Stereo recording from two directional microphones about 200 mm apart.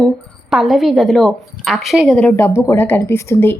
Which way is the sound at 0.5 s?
Centre (ahead or behind).